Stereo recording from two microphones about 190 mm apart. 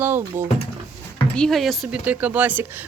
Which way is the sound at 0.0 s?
10° right (ahead or behind).